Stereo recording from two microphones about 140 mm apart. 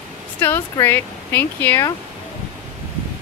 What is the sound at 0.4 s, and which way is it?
Speech, 15° left (ahead or behind).